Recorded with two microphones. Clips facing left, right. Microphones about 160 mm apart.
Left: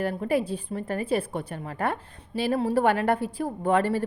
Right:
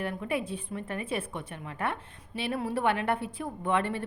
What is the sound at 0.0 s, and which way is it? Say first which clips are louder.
A woman's voice: left 6 dB; 35° left (ahead or behind).